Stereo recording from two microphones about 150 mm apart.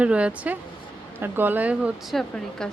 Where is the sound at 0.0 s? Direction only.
5° right (ahead or behind).